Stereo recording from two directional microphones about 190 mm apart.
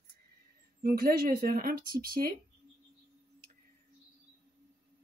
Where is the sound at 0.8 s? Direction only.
55° right (ahead or behind).